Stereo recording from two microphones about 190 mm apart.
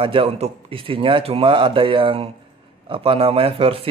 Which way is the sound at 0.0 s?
30° right (ahead or behind).